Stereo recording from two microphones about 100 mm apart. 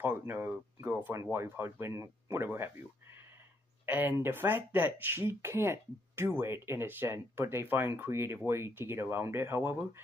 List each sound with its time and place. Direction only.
0.0 s speech: 20° right (ahead or behind)